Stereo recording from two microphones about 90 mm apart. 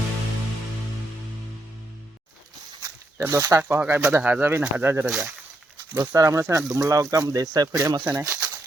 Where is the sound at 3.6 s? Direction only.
20° right (ahead or behind).